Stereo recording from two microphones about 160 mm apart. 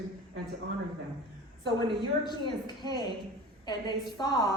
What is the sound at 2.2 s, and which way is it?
Speech, 30° left (ahead or behind).